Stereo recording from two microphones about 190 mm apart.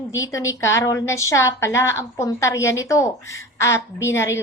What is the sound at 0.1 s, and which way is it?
A woman's voice, 15° left (ahead or behind).